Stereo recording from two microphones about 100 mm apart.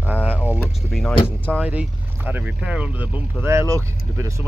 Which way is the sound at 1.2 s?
15° left (ahead or behind).